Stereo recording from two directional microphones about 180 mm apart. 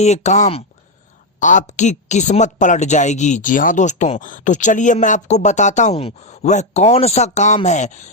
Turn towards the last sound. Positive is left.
turn(degrees=40)  # may be behind; listen again after turning